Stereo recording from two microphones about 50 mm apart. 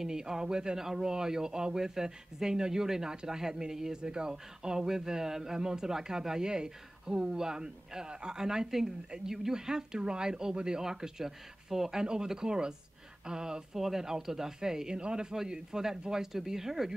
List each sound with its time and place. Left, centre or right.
0.0 s speech: centre